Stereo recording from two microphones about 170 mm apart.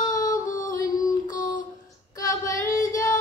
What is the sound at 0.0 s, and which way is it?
Child singing, 20° left (ahead or behind).